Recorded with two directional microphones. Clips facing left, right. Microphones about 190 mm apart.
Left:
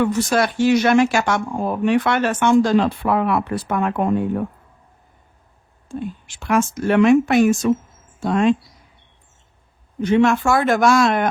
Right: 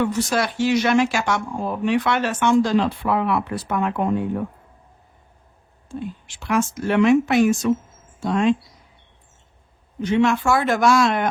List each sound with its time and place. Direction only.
0.0 s speech: 50° left (ahead or behind)
5.9 s speech: 50° left (ahead or behind)
10.0 s speech: 50° left (ahead or behind)